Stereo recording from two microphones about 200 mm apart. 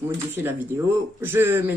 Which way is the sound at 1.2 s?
10° right (ahead or behind).